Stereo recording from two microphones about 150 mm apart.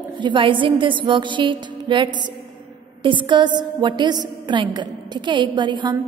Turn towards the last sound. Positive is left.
turn(degrees=-30)  # may be behind; listen again after turning